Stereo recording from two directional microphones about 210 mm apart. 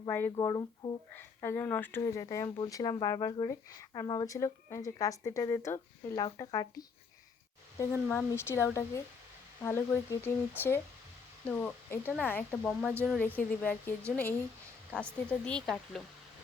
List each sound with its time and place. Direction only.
0.0 s speech: 10° left (ahead or behind)
12.9 s speech: 10° right (ahead or behind)
13.1 s speech: 10° left (ahead or behind)
15.3 s speech: 5° left (ahead or behind)